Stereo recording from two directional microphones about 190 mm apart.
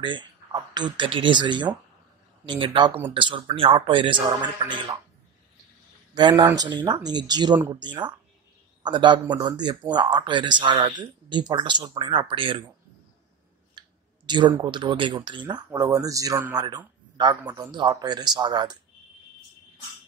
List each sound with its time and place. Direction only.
0.0 s speech: 25° right (ahead or behind)
6.1 s speech: 25° right (ahead or behind)
13.7 s a man's voice: 25° right (ahead or behind)